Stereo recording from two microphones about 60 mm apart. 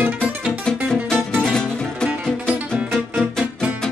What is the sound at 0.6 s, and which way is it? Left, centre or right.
Music, centre.